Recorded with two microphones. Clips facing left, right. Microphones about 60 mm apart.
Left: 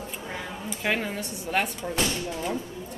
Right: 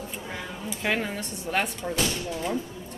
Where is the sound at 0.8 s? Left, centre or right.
Centre.